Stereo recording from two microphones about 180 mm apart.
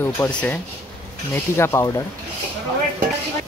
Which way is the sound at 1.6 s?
15° left (ahead or behind).